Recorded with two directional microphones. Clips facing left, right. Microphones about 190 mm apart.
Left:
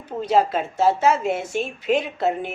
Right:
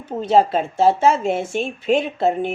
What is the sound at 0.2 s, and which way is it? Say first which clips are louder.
A woman's voice: right 3 dB; 25° right (ahead or behind).